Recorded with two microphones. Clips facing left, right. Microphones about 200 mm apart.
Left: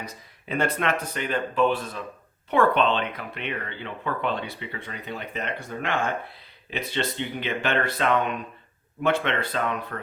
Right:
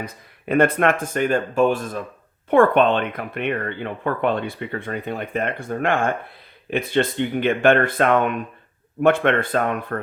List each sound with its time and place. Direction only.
0.0 s speech: 55° right (ahead or behind)